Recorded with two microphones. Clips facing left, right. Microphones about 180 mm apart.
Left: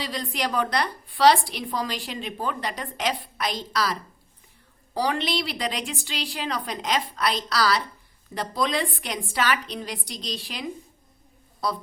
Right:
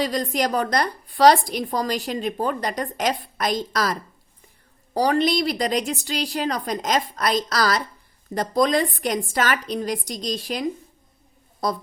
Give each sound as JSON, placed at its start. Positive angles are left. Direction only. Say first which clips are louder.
{"t": 0.0, "sound": "a woman's voice", "louder": "right 7 dB", "side_deg": -45}
{"t": 4.9, "sound": "a woman's voice", "louder": "right 6 dB", "side_deg": -45}